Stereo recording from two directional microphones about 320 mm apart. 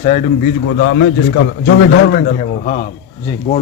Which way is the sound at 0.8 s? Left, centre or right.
Left.